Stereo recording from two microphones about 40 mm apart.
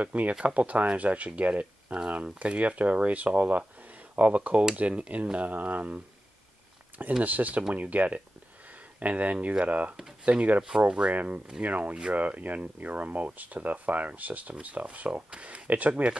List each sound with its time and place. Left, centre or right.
0.0 s speech: right
7.2 s speech: right
11.1 s speech: right